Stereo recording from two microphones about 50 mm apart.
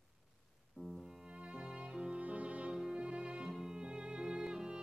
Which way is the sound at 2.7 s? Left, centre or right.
Centre.